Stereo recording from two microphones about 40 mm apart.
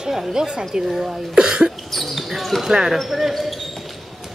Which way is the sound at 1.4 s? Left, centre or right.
Centre.